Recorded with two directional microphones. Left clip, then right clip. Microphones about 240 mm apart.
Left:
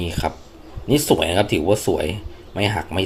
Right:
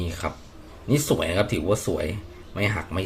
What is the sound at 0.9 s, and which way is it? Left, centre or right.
Speech, centre.